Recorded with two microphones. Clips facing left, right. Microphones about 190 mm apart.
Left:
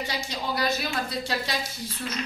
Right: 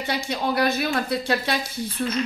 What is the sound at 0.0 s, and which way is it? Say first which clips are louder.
Speech: right 6 dB; 60° right (ahead or behind).